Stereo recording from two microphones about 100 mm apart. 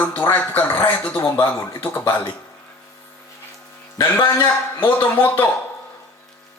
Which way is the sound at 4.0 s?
35° left (ahead or behind).